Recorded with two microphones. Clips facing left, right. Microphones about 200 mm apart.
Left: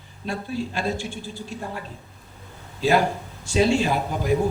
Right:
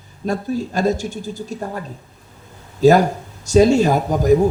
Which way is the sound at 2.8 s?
45° right (ahead or behind).